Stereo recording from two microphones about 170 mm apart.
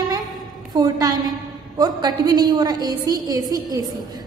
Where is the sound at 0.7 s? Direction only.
20° right (ahead or behind).